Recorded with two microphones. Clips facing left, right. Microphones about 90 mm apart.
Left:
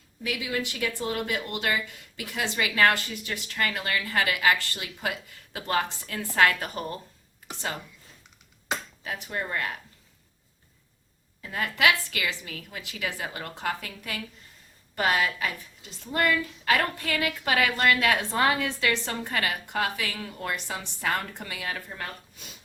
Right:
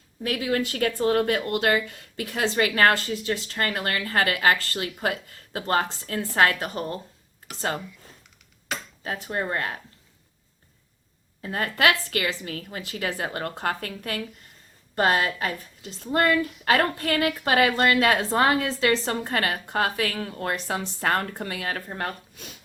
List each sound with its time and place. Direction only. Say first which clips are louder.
0.2 s a woman's voice: right 5 dB; 45° right (ahead or behind); by 3.7 s 30° right (ahead or behind)
3.7 s a woman's voice: right 2 dB; 40° right (ahead or behind)
9.0 s a woman's voice: right 4 dB; 35° right (ahead or behind)
11.4 s a woman's voice: right 2 dB; 45° right (ahead or behind)